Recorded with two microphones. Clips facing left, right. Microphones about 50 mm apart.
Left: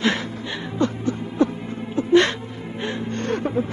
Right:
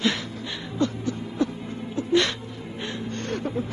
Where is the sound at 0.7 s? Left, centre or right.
Left.